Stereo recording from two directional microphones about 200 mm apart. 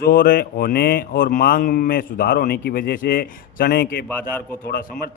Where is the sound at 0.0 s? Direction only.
45° left (ahead or behind).